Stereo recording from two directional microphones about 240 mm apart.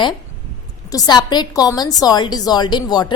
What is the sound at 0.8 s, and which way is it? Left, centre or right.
A woman's voice, centre.